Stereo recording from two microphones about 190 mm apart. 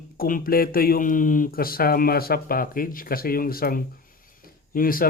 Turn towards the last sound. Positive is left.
turn(degrees=50)  # may be behind; listen again after turning